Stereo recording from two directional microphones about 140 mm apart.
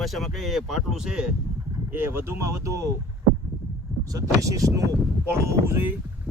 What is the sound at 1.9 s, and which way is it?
Speech, 15° right (ahead or behind).